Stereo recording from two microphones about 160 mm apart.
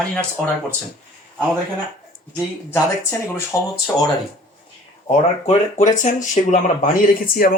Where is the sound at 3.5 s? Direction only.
20° left (ahead or behind).